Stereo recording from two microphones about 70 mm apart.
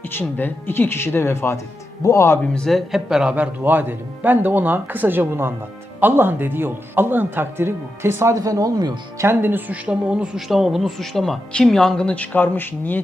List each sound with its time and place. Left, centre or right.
0.1 s speech: left
2.6 s speech: centre
3.3 s a man's voice: right
8.4 s speech: right
9.2 s speech: right
10.3 s speech: centre; by 13.0 s left